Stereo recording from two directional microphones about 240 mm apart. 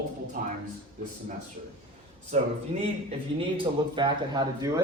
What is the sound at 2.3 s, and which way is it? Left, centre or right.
A man's voice, right.